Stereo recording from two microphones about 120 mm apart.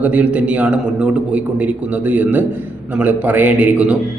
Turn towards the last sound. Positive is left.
turn(degrees=-10)  # may be behind; listen again after turning